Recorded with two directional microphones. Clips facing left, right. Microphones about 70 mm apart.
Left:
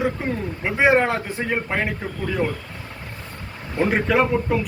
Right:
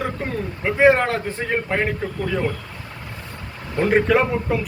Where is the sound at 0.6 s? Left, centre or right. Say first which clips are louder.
Right 2 dB; centre.